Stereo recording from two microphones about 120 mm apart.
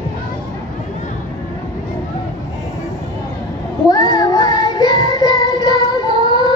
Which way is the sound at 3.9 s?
35° left (ahead or behind).